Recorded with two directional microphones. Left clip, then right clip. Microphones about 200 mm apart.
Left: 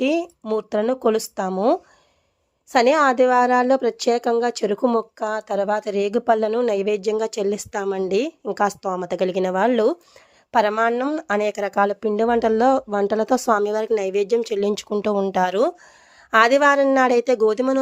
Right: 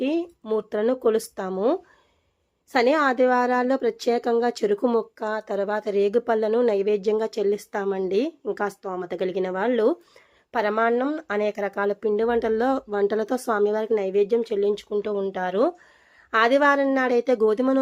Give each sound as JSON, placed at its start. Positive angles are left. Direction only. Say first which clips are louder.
{"t": 0.0, "sound": "speech", "louder": "left 4 dB", "side_deg": 25}